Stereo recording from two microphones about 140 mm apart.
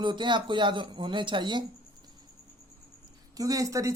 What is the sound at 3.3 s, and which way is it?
Speech, 25° right (ahead or behind).